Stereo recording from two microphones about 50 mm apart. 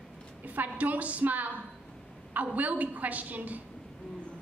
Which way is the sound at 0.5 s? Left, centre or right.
Right.